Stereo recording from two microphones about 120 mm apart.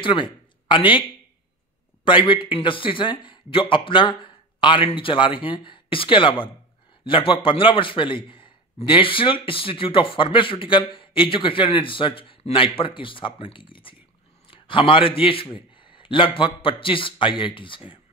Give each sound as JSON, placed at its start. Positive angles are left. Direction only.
{"t": 0.0, "sound": "speech", "side_deg": 45}
{"t": 2.0, "sound": "a man's voice", "side_deg": 45}